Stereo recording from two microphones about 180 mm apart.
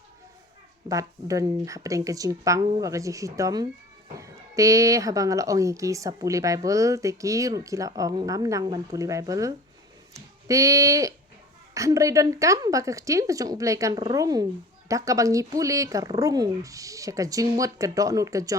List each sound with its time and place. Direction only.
0.9 s a woman's voice: 20° right (ahead or behind)